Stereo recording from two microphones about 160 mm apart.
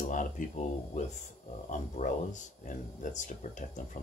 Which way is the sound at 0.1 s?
55° left (ahead or behind).